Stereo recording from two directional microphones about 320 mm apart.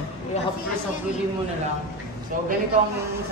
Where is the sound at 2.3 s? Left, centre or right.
Right.